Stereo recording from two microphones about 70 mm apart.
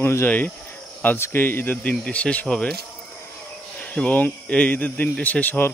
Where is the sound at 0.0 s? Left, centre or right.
Left.